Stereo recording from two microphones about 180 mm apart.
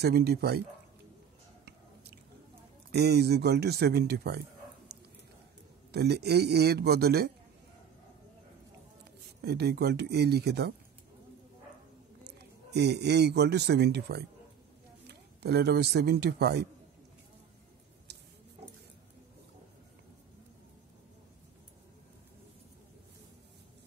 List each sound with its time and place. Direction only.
0.0 s speech: 65° right (ahead or behind)
2.9 s speech: 65° right (ahead or behind)
5.9 s speech: 65° right (ahead or behind)
9.4 s speech: 65° right (ahead or behind)
12.3 s speech: 65° right (ahead or behind)